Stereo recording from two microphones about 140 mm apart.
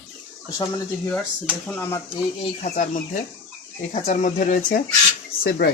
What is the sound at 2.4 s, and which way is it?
Speech, 55° left (ahead or behind).